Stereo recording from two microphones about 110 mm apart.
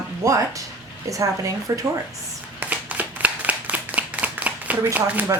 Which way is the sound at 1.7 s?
30° right (ahead or behind).